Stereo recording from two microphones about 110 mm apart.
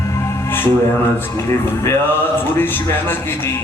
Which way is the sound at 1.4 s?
25° left (ahead or behind).